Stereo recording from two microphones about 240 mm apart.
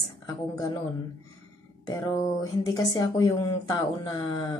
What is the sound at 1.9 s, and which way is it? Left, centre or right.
A woman's voice, centre.